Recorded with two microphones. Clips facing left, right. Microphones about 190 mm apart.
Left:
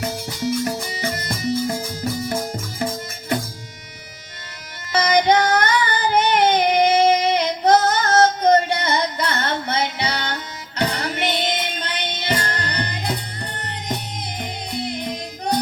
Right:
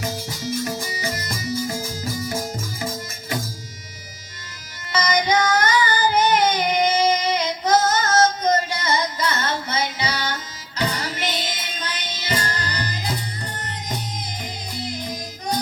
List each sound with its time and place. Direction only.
0.0 s music: 60° left (ahead or behind)
4.9 s child singing: 60° left (ahead or behind)
10.8 s music: 60° left (ahead or behind)